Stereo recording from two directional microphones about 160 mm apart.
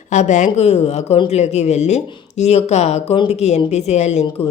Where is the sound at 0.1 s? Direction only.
50° left (ahead or behind).